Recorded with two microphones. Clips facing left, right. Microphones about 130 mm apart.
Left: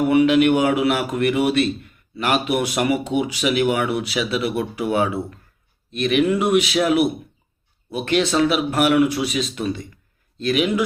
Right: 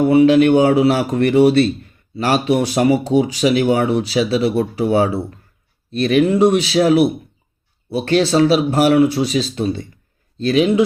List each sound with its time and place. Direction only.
0.0 s a man's voice: 30° right (ahead or behind)